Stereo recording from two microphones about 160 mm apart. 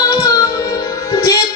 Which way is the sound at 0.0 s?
25° left (ahead or behind).